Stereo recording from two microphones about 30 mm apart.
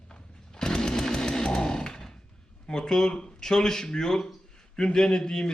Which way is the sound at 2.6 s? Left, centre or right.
Left.